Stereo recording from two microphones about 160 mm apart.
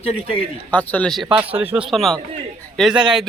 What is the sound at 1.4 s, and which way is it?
Speech, 35° right (ahead or behind).